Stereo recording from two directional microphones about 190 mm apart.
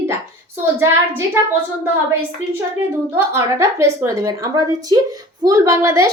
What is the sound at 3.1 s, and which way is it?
A woman's voice, 15° right (ahead or behind).